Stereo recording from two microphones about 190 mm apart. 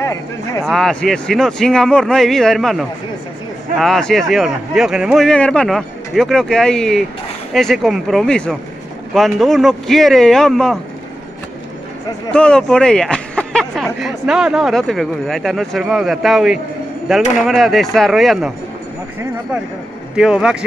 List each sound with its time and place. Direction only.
0.0 s speech: 15° left (ahead or behind)
0.7 s a man's voice: centre (ahead or behind)
12.3 s a man's voice: 5° left (ahead or behind)
20.2 s a man's voice: 5° right (ahead or behind)